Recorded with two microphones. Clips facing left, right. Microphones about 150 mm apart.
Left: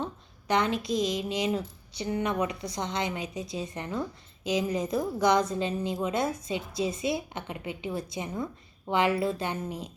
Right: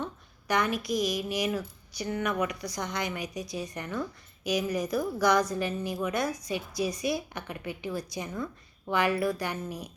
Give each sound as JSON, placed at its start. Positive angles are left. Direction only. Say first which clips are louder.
{"t": 0.0, "sound": "a woman's voice", "louder": "left 2 dB", "side_deg": 25}